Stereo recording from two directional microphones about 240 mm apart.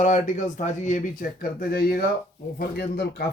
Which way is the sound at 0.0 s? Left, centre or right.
Left.